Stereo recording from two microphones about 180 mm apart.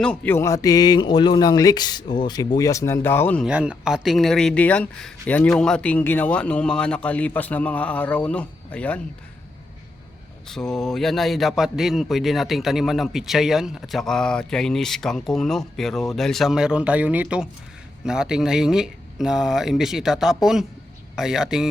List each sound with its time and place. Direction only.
0.0 s speech: 5° left (ahead or behind)
3.4 s speech: 5° right (ahead or behind)
10.5 s a man's voice: centre (ahead or behind)